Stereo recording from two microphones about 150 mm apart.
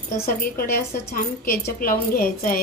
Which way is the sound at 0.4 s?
75° left (ahead or behind).